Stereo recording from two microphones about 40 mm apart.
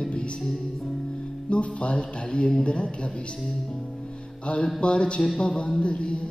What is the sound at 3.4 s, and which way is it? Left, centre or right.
Music, centre.